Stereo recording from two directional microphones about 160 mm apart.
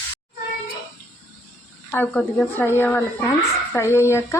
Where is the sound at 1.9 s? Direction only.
5° left (ahead or behind).